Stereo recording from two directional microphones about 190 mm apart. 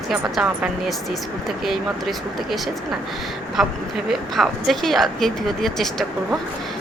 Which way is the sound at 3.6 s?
Centre (ahead or behind).